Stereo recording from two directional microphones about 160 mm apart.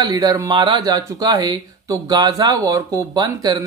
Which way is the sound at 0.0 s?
25° right (ahead or behind).